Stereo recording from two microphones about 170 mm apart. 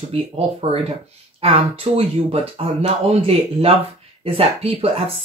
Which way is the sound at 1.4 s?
35° right (ahead or behind).